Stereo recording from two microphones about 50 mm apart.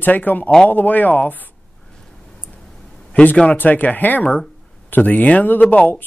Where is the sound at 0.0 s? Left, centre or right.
Left.